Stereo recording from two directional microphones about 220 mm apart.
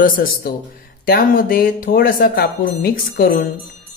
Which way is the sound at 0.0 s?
40° left (ahead or behind).